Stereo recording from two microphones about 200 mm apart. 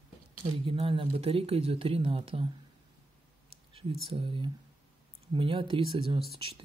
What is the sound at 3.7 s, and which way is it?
Speech, 30° right (ahead or behind).